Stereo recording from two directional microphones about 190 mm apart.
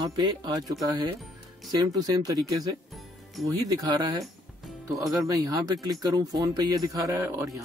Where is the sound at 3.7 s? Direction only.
20° right (ahead or behind).